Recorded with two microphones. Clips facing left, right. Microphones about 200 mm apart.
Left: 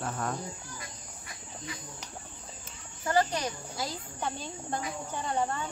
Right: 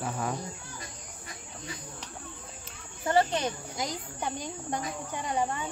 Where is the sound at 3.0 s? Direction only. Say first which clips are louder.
Right 2 dB; 25° right (ahead or behind).